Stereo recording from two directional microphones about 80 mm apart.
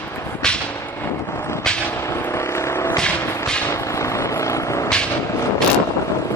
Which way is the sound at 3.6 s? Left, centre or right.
Left.